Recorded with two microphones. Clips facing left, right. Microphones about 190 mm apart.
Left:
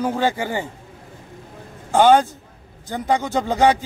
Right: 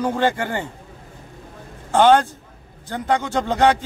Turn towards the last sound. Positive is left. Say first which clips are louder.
# even
turn(degrees=10)  # may be behind; listen again after turning